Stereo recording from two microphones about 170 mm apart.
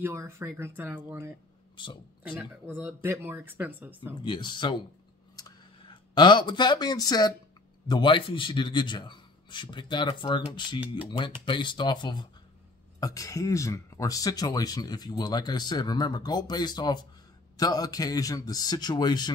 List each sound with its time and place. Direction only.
0.0 s speech: 15° right (ahead or behind)
4.2 s speech: 25° left (ahead or behind)
5.3 s a sound: 25° left (ahead or behind)
7.9 s speech: 30° left (ahead or behind)